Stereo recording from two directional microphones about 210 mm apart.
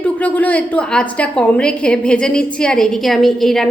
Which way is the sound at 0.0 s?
5° left (ahead or behind).